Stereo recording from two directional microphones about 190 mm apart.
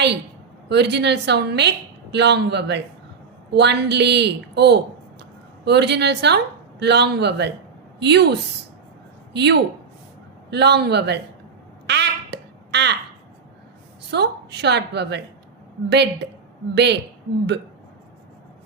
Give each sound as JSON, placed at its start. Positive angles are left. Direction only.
{"t": 0.7, "sound": "a woman's voice", "side_deg": -60}
{"t": 11.9, "sound": "a sound", "side_deg": -65}
{"t": 14.1, "sound": "a woman's voice", "side_deg": -60}